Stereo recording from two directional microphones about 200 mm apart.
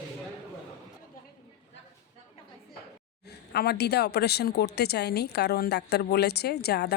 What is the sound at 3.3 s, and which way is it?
A woman's voice, 55° left (ahead or behind).